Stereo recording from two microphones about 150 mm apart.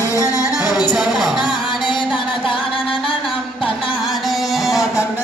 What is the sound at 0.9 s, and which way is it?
Music, 5° right (ahead or behind).